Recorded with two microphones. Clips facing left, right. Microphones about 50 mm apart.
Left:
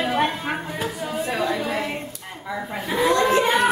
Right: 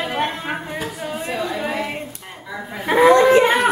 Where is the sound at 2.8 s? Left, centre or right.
Right.